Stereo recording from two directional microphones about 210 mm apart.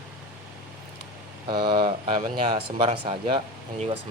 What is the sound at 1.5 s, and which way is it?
Speech, 20° right (ahead or behind).